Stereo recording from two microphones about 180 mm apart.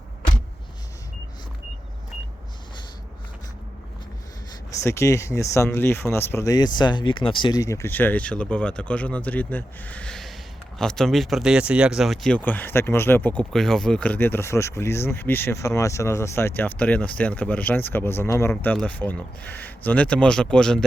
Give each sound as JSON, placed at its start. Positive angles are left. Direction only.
{"t": 4.8, "sound": "speech", "side_deg": 15}